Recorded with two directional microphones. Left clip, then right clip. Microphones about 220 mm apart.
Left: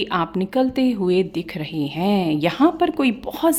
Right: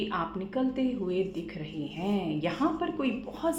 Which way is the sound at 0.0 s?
45° left (ahead or behind).